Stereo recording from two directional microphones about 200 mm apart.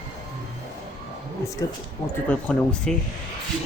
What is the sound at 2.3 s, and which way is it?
Speech, 5° left (ahead or behind).